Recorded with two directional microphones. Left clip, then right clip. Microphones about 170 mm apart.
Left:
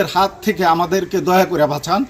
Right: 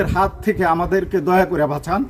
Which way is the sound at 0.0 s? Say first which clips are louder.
Left 2 dB; 10° right (ahead or behind).